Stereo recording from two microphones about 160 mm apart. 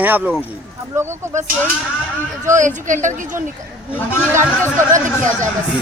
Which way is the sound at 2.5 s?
50° right (ahead or behind).